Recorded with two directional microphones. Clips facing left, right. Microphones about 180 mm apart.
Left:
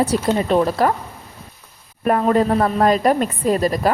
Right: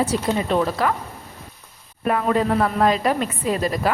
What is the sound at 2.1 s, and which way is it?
Speech, 40° left (ahead or behind).